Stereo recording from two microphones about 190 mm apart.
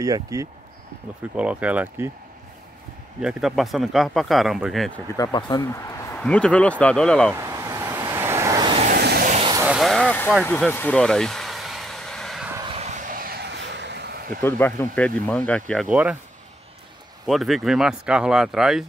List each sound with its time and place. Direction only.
0.0 s speech: 15° right (ahead or behind)
1.3 s speech: 5° right (ahead or behind)
3.2 s speech: 5° right (ahead or behind)
5.1 s speech: 20° left (ahead or behind)
6.2 s speech: 5° left (ahead or behind)
7.3 s vehicle: 15° right (ahead or behind)
8.8 s vehicle: 55° right (ahead or behind)
9.7 s vehicle: centre (ahead or behind)
10.4 s a sound: 10° left (ahead or behind)
12.6 s vehicle: 35° right (ahead or behind); by 14.4 s 50° right (ahead or behind)
14.4 s speech: 10° left (ahead or behind); by 16.2 s 5° right (ahead or behind)
17.3 s speech: centre (ahead or behind)